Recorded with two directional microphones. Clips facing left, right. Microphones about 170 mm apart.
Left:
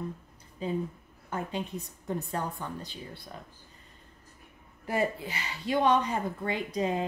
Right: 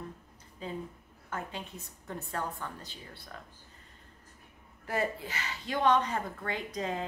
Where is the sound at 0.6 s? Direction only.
15° left (ahead or behind).